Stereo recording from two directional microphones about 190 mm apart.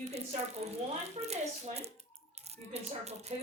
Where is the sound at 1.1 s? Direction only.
35° right (ahead or behind).